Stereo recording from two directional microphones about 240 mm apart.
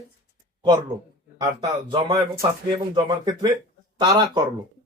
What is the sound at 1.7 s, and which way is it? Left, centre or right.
Speech, centre.